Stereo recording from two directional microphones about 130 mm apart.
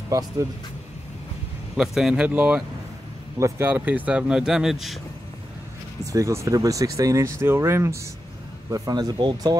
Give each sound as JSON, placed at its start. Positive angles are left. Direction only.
{"t": 0.1, "sound": "speech", "side_deg": -25}
{"t": 1.8, "sound": "speech", "side_deg": -5}
{"t": 3.3, "sound": "speech", "side_deg": -20}
{"t": 6.1, "sound": "speech", "side_deg": -25}